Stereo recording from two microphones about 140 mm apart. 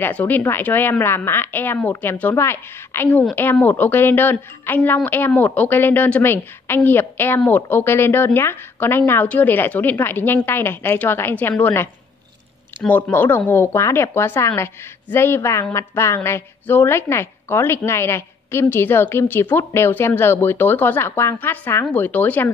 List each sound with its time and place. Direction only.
0.0 s a woman's voice: 10° left (ahead or behind)